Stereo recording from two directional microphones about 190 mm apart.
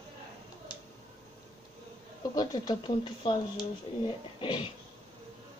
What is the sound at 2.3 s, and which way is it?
Speech, 20° left (ahead or behind).